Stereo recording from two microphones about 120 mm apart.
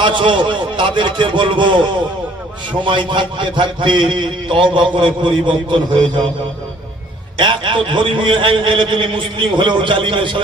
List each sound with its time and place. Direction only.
0.0 s a man's voice: 40° right (ahead or behind)
7.3 s a man's voice: 40° right (ahead or behind)